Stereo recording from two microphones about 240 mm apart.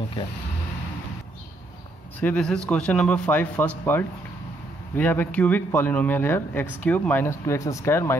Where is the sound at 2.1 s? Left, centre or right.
Centre.